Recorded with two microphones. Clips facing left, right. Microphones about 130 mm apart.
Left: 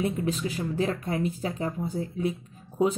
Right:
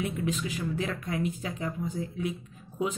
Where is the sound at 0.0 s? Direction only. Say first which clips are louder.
Left 3 dB; 35° left (ahead or behind).